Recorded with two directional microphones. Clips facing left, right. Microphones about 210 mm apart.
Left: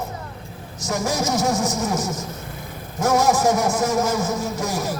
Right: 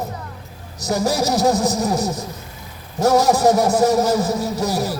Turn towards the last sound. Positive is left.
turn(degrees=-35)  # may be behind; listen again after turning